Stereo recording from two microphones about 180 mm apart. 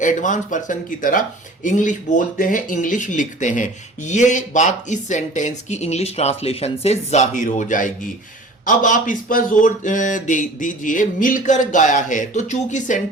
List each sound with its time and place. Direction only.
0.0 s speech: 45° left (ahead or behind)